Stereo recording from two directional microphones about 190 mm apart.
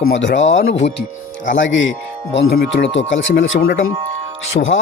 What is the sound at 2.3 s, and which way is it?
Speech, 60° left (ahead or behind).